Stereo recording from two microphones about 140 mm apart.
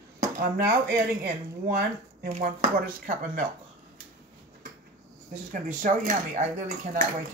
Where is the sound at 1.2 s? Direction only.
90° right.